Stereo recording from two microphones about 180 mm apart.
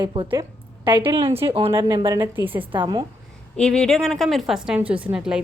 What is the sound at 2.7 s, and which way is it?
Speech, 25° right (ahead or behind).